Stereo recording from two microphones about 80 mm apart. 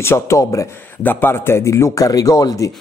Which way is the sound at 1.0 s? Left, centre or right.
Left.